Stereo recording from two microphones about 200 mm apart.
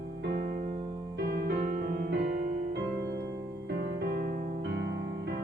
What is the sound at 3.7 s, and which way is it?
Music, 55° right (ahead or behind).